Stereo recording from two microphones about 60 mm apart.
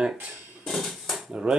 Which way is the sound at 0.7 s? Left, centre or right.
Centre.